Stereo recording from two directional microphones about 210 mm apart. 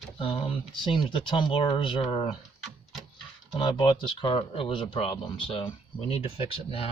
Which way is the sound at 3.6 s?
25° left (ahead or behind).